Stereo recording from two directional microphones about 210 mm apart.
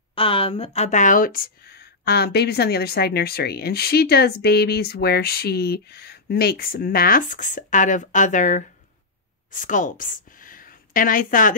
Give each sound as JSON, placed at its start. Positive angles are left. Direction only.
{"t": 0.1, "sound": "a woman's voice", "side_deg": 25}